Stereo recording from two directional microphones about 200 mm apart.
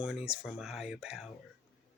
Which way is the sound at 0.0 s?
5° right (ahead or behind).